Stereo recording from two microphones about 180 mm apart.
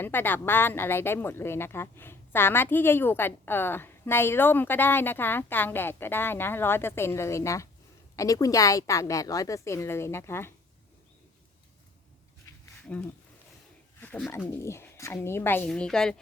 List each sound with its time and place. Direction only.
0.0 s speech: 10° left (ahead or behind)
12.9 s speech: 10° left (ahead or behind)
14.3 s speech: 15° left (ahead or behind)